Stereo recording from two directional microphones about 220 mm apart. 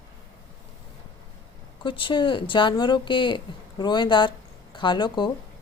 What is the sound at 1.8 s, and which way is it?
Speech, 20° left (ahead or behind).